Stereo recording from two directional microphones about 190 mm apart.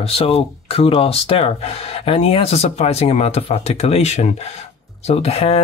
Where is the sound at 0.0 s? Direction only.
30° left (ahead or behind).